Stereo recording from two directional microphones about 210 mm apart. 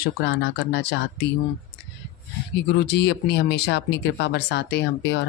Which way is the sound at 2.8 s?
55° left (ahead or behind).